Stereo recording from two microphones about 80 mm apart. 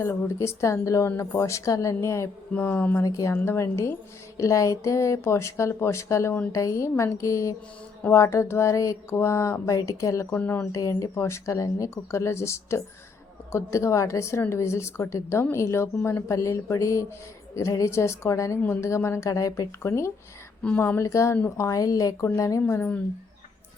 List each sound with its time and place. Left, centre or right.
0.0 s speech: left
2.6 s speech: left
3.0 s speech: left
3.3 s speech: left
10.2 s speech: left
10.7 s speech: left
20.7 s speech: left
21.0 s a woman's voice: left
22.7 s speech: left